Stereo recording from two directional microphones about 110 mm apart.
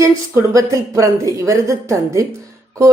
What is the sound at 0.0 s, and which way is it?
A woman's voice, 30° right (ahead or behind).